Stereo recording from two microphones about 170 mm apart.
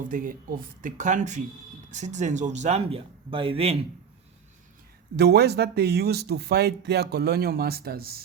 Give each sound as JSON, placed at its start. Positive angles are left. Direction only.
{"t": 0.0, "sound": "speech", "side_deg": -50}
{"t": 5.1, "sound": "speech", "side_deg": -70}